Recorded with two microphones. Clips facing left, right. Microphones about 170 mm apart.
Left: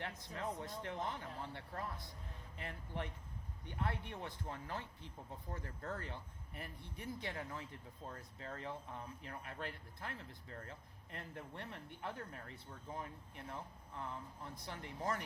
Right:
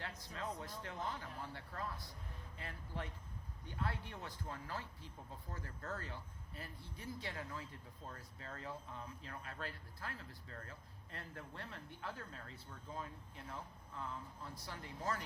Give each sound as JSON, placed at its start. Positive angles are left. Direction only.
{"t": 0.0, "sound": "speech", "side_deg": 25}